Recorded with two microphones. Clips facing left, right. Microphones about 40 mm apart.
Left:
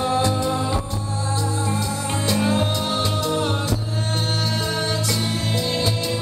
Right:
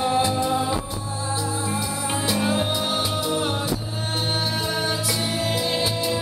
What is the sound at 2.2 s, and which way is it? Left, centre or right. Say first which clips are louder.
Music: left 2 dB; centre.